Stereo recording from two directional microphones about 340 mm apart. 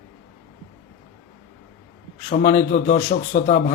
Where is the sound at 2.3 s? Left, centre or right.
Left.